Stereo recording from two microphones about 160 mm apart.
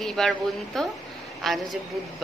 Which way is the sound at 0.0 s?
5° left (ahead or behind).